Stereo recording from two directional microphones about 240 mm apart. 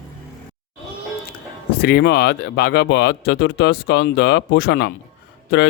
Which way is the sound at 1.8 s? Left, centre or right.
Left.